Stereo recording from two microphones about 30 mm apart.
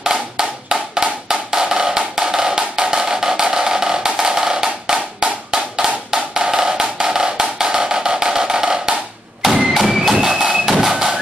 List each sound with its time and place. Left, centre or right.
0.0 s wood block: right
1.3 s music: centre
9.4 s thump: centre
9.8 s music: centre